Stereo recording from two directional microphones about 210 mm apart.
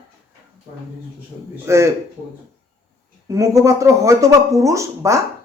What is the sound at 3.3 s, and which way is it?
Speech, 15° right (ahead or behind).